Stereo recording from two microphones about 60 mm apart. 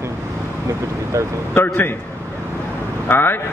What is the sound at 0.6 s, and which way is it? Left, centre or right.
Speech, right.